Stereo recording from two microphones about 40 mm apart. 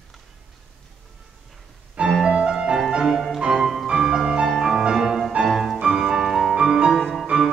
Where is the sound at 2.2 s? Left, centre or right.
Right.